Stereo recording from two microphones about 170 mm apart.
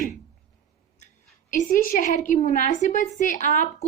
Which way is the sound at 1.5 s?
50° left (ahead or behind).